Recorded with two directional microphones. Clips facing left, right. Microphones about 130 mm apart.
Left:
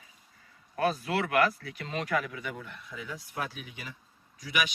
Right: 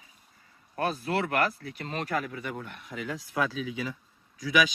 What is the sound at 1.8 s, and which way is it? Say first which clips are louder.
Speech: even; 40° right (ahead or behind).